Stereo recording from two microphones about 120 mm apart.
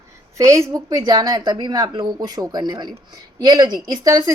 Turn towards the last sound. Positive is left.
turn(degrees=-30)  # may be behind; listen again after turning